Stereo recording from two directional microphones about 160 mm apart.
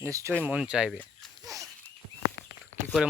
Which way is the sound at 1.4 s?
20° right (ahead or behind).